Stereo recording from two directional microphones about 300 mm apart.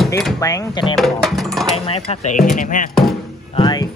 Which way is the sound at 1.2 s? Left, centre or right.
Centre.